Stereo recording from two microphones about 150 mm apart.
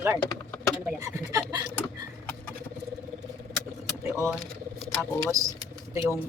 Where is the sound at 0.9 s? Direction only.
20° right (ahead or behind).